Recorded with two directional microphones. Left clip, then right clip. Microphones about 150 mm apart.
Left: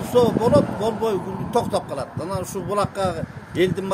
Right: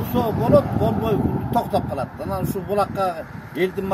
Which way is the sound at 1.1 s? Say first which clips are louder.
Right 2 dB; 30° left (ahead or behind).